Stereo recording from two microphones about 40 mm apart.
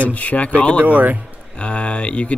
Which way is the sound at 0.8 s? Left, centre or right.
Right.